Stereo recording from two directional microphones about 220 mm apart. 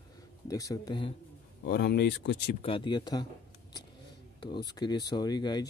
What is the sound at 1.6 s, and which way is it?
Speech, 50° left (ahead or behind).